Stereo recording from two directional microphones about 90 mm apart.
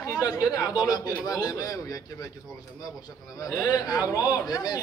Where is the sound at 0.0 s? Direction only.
40° left (ahead or behind).